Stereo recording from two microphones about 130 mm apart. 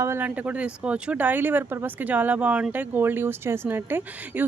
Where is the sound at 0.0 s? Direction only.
15° right (ahead or behind).